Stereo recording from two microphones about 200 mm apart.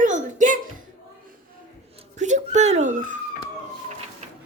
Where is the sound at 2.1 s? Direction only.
35° right (ahead or behind).